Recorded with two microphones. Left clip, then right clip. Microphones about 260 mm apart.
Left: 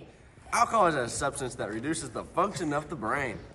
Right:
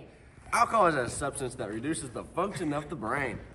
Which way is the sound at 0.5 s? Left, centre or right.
Centre.